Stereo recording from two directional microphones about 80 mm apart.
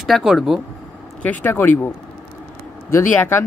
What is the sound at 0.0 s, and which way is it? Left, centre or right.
Speech, centre.